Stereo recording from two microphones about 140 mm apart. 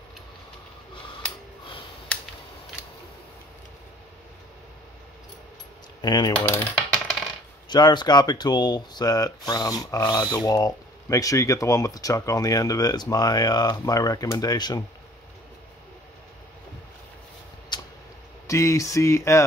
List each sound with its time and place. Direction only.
5.9 s speech: 30° left (ahead or behind)
6.3 s typing: 15° left (ahead or behind)
6.9 s coin: centre (ahead or behind)
7.7 s speech: 30° left (ahead or behind)
17.7 s a sound: 30° left (ahead or behind)
18.5 s speech: 20° left (ahead or behind)